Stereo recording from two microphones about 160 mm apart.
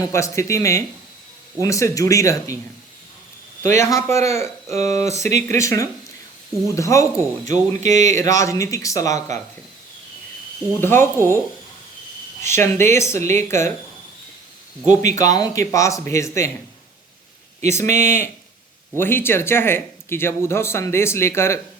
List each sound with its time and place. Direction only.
0.1 s speech: 20° left (ahead or behind)
3.8 s speech: 20° left (ahead or behind)
10.8 s speech: 15° left (ahead or behind)
12.4 s speech: 15° left (ahead or behind)
15.0 s speech: 20° left (ahead or behind)
17.7 s speech: 15° left (ahead or behind)